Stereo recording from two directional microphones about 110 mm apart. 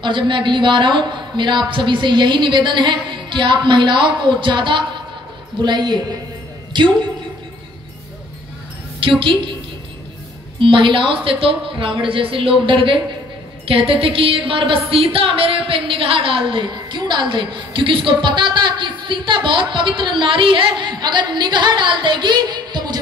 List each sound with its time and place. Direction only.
0.0 s a woman's voice: 45° right (ahead or behind)
9.0 s a woman's voice: 50° right (ahead or behind)
10.6 s a woman's voice: 50° right (ahead or behind)